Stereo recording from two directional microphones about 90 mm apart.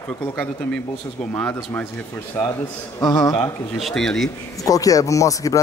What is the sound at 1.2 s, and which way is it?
Speech, 15° left (ahead or behind).